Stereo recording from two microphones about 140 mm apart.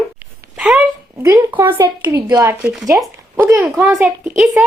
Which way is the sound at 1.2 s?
20° right (ahead or behind).